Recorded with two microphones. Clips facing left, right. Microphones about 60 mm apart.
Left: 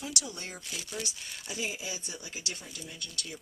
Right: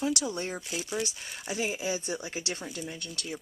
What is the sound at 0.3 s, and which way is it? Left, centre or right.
Speech, right.